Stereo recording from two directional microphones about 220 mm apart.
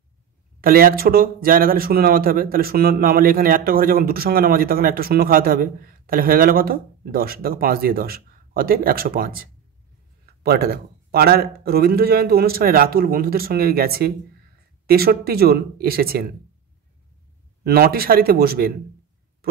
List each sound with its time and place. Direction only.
0.6 s speech: 40° right (ahead or behind)
17.6 s speech: 45° right (ahead or behind)